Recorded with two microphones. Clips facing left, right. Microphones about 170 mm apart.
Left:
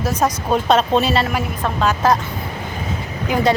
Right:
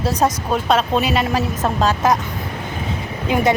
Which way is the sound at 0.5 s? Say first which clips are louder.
Left 2 dB; 5° right (ahead or behind).